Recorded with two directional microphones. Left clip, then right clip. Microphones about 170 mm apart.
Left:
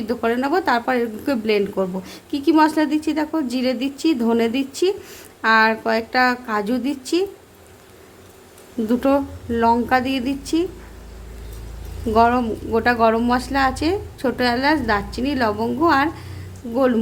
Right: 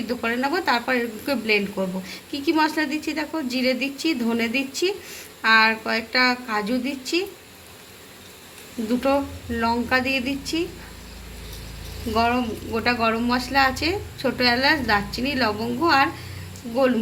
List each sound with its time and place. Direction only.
0.1 s speech: 50° left (ahead or behind)
8.9 s a woman's voice: 55° left (ahead or behind)
12.1 s speech: 60° left (ahead or behind)